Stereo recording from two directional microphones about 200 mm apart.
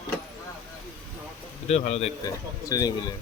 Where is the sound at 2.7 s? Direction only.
20° left (ahead or behind).